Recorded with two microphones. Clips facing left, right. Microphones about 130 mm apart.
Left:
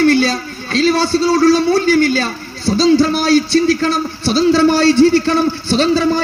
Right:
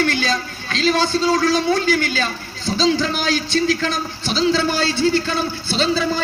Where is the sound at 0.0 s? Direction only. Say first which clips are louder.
Left 8 dB; 40° left (ahead or behind).